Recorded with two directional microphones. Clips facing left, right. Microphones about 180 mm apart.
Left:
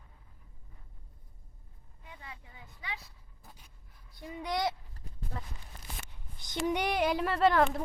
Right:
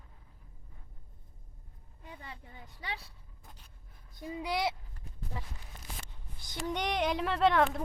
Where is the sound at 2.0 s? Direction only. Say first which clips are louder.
Right 2 dB; 35° right (ahead or behind).